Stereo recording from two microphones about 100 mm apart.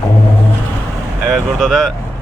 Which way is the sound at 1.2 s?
Centre (ahead or behind).